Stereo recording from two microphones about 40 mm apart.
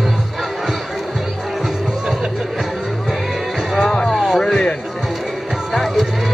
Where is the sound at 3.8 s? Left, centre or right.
Centre.